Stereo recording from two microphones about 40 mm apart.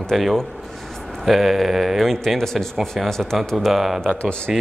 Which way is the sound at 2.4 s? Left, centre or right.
Centre.